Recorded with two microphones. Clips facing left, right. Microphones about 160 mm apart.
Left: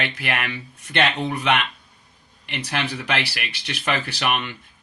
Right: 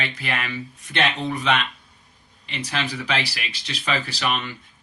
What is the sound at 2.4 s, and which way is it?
Speech, 60° left (ahead or behind).